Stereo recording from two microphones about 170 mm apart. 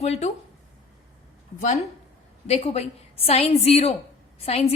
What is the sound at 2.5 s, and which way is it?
A woman's voice, 40° left (ahead or behind).